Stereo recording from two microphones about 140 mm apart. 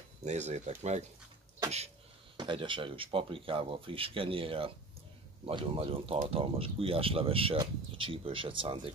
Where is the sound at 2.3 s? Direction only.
35° right (ahead or behind).